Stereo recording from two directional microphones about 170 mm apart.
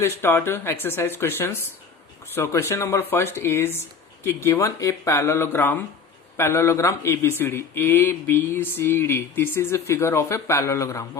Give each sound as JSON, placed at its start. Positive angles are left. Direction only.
{"t": 0.0, "sound": "a man's voice", "side_deg": 15}